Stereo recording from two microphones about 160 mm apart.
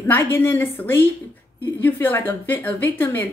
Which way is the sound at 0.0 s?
15° left (ahead or behind).